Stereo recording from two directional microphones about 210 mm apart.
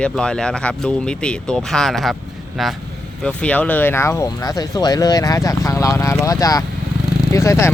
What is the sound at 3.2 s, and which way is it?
Speech, 5° left (ahead or behind).